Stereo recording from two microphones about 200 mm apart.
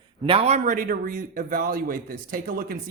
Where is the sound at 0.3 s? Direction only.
30° right (ahead or behind).